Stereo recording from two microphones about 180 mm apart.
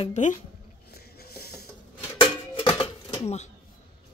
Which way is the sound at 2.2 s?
30° left (ahead or behind).